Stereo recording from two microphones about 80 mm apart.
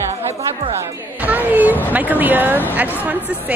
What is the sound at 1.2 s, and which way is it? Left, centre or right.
Speech, right.